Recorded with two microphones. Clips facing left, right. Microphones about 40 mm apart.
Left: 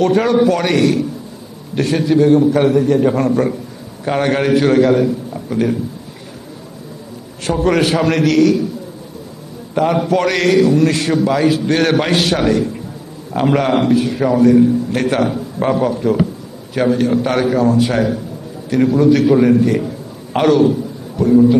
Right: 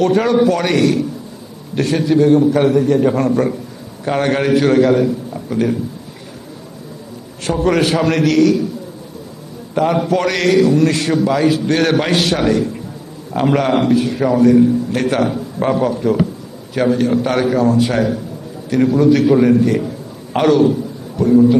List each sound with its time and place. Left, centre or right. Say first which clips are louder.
0.0 s a man's voice: even; centre
7.4 s a man's voice: even; centre
9.7 s a man's voice: left 1 dB; centre